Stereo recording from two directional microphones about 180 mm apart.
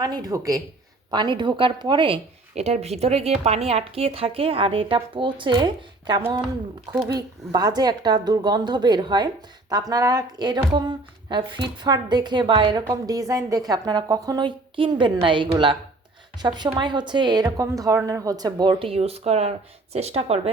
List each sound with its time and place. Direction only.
0.0 s a woman's voice: 20° right (ahead or behind)